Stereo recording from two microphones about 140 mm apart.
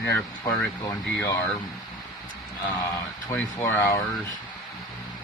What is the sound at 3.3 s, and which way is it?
Speech, 15° left (ahead or behind).